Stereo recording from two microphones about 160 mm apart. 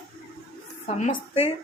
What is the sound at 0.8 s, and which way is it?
Speech, 40° left (ahead or behind).